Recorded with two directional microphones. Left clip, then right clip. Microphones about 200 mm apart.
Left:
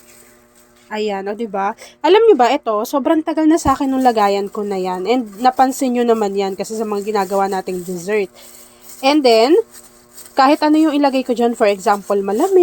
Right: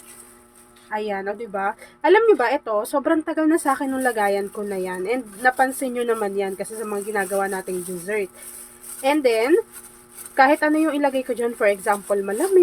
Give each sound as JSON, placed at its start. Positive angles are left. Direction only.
{"t": 0.9, "sound": "speech", "side_deg": 30}